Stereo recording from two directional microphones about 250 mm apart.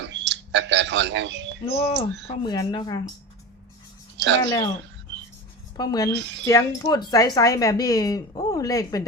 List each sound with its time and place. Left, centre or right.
0.0 s speech: right
2.2 s speech: centre
4.2 s speech: right
5.7 s speech: centre